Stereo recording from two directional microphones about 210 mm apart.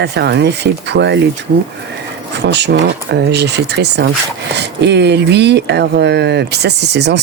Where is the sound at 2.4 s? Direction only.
55° right (ahead or behind).